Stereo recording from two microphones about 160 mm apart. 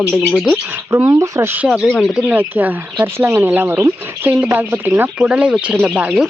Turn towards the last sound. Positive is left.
turn(degrees=-10)  # may be behind; listen again after turning